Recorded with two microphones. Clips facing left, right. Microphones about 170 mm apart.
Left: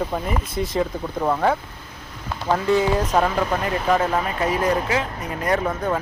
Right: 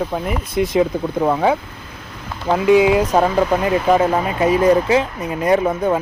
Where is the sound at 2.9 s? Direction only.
15° right (ahead or behind).